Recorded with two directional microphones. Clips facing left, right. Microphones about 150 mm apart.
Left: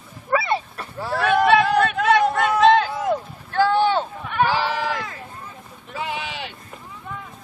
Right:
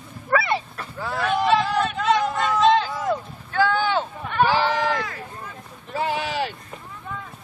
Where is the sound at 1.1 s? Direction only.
60° left (ahead or behind).